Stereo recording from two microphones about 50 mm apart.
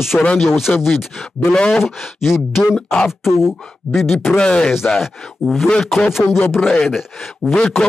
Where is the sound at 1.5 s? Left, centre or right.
Centre.